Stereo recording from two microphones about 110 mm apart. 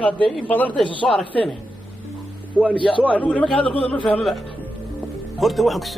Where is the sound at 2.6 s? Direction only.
15° right (ahead or behind).